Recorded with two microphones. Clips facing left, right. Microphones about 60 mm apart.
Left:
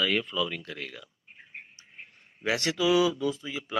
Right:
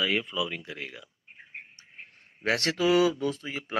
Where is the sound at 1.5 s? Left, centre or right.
Right.